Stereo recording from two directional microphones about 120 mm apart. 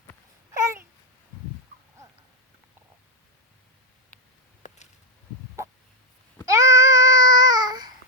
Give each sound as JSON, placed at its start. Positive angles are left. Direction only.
{"t": 0.5, "sound": "babbling", "side_deg": -25}
{"t": 4.6, "sound": "a sound", "side_deg": 90}
{"t": 6.4, "sound": "babbling", "side_deg": -30}